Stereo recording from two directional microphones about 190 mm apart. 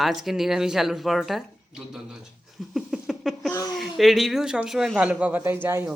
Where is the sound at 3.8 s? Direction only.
Centre (ahead or behind).